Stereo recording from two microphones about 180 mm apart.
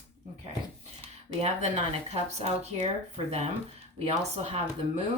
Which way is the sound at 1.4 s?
40° right (ahead or behind).